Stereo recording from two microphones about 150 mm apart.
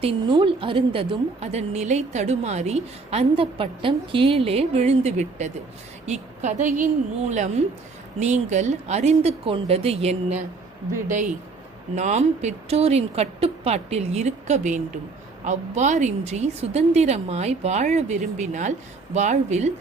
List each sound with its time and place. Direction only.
0.0 s a woman's voice: 35° right (ahead or behind)
11.9 s a woman's voice: 50° right (ahead or behind)